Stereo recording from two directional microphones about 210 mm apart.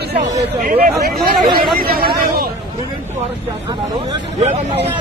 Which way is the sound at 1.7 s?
45° right (ahead or behind).